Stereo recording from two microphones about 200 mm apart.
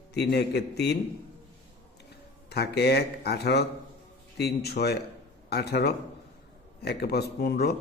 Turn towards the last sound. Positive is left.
turn(degrees=55)  # may be behind; listen again after turning